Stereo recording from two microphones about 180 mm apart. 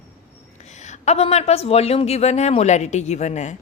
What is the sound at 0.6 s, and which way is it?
Speech, 40° left (ahead or behind).